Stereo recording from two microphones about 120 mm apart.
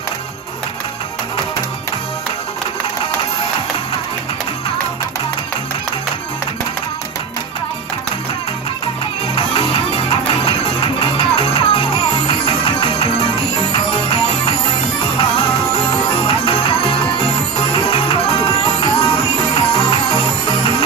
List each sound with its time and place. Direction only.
9.3 s music: 50° left (ahead or behind)